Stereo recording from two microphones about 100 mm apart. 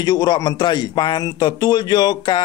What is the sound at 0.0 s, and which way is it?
A man's voice, 40° left (ahead or behind).